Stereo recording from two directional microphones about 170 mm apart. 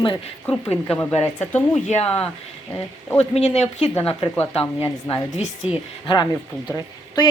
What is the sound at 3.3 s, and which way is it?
Speech, 40° left (ahead or behind).